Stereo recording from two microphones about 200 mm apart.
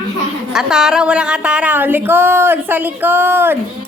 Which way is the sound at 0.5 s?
Centre (ahead or behind).